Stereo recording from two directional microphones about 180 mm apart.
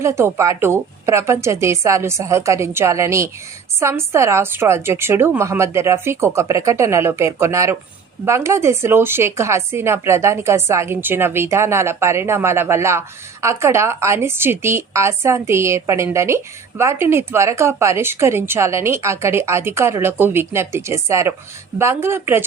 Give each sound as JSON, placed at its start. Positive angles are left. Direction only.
{"t": 0.0, "sound": "a woman's voice", "side_deg": -15}